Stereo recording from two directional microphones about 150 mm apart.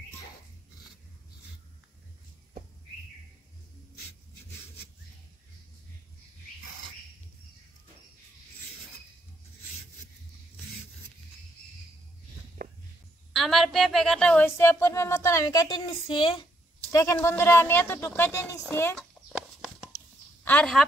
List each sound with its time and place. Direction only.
12.6 s walk: 65° right (ahead or behind)
13.3 s a woman's voice: centre (ahead or behind); by 16.4 s 30° left (ahead or behind)
16.9 s speech: 20° left (ahead or behind)
20.4 s a woman's voice: 10° left (ahead or behind)